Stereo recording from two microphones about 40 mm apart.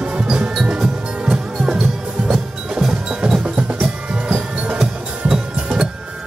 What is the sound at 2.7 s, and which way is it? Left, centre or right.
Percussion, centre.